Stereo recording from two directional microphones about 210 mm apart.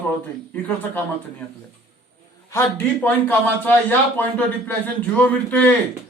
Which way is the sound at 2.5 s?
10° left (ahead or behind).